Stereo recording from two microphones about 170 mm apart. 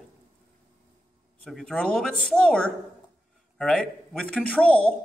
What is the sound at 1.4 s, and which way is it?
A man's voice, 5° left (ahead or behind).